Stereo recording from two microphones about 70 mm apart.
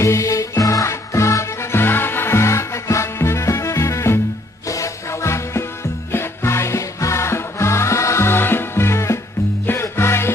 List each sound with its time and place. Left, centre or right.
0.0 s music: left